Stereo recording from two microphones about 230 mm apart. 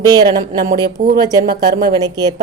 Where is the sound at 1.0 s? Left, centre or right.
Right.